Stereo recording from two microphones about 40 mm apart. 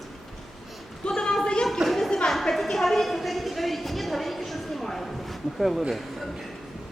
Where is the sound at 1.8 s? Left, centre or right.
Centre.